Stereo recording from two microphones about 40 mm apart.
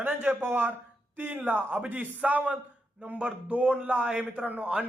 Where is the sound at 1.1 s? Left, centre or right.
Right.